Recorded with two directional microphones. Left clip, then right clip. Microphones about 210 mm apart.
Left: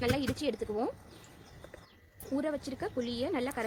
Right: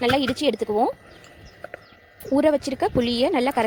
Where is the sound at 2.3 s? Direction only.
30° right (ahead or behind).